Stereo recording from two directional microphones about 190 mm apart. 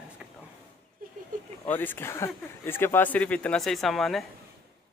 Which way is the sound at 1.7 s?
10° left (ahead or behind).